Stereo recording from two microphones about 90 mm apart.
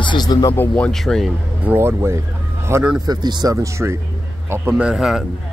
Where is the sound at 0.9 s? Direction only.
5° left (ahead or behind).